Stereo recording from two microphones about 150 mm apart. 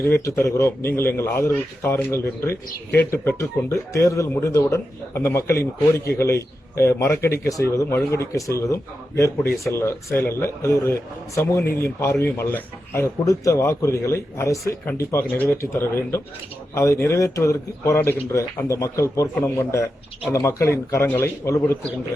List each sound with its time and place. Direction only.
0.0 s a man's voice: 20° left (ahead or behind)